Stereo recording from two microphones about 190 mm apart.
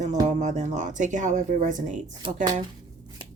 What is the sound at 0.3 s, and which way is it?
Speech, 40° right (ahead or behind).